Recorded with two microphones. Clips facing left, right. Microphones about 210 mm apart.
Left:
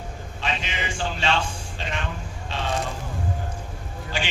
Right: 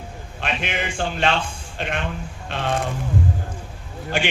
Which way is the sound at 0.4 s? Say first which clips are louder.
Right 3 dB; 55° right (ahead or behind).